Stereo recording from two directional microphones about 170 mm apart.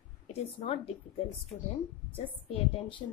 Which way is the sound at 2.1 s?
35° left (ahead or behind).